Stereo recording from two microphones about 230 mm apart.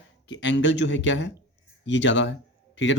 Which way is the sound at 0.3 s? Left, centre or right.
Left.